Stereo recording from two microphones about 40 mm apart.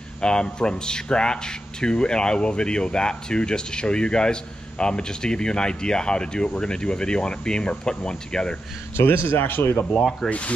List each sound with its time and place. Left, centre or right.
0.2 s speech: left
8.9 s speech: left
10.2 s speech: centre